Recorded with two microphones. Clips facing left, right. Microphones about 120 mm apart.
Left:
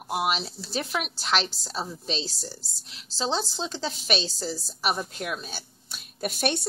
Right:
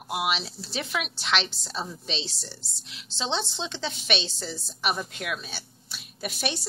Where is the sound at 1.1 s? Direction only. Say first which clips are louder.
Left 2 dB; 40° left (ahead or behind).